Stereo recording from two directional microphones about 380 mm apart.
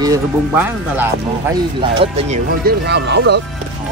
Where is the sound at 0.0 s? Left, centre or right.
Centre; by 3.3 s right.